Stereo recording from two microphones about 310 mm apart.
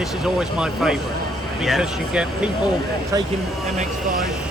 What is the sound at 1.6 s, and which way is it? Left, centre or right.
Speech, centre.